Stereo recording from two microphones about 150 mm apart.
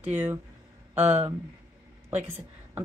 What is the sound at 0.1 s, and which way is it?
A woman's voice, 15° right (ahead or behind).